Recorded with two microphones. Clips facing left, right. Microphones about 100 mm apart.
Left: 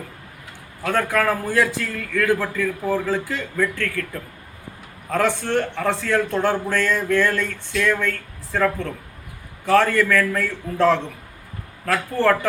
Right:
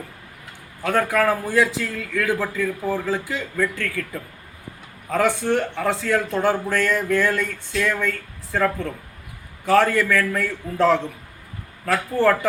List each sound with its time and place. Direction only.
0.8 s a man's voice: 5° right (ahead or behind)